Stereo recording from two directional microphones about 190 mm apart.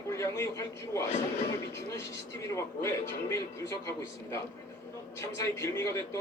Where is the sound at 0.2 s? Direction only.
15° left (ahead or behind).